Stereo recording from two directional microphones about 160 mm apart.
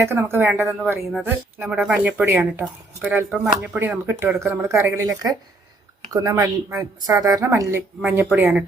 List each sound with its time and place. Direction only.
0.0 s a woman's voice: 15° right (ahead or behind)